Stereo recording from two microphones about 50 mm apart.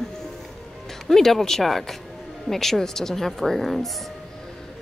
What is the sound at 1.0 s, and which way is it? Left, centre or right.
A woman's voice, centre.